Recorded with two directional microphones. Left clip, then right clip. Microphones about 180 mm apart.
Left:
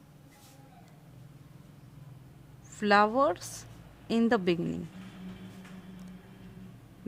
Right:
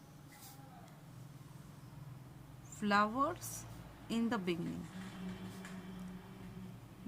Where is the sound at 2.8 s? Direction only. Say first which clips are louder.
Left 9 dB; 40° left (ahead or behind).